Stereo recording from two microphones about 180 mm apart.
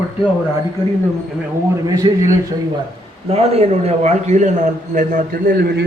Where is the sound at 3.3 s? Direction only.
35° right (ahead or behind); by 5.9 s 65° right (ahead or behind).